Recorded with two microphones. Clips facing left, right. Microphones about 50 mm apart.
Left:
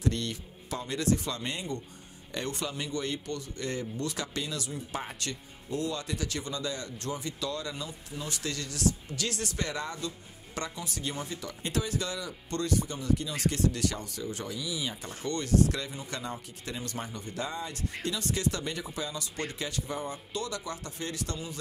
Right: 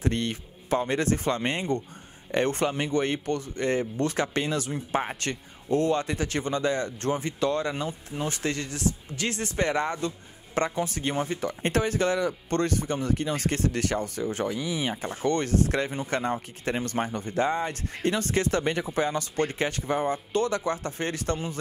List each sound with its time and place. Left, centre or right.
0.0 s speech: right